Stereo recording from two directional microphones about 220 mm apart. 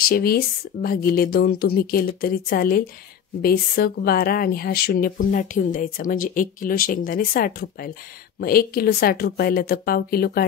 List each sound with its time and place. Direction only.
0.0 s speech: 40° left (ahead or behind)